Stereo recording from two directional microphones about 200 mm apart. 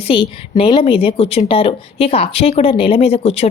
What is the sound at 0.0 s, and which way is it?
A woman's voice, 25° left (ahead or behind).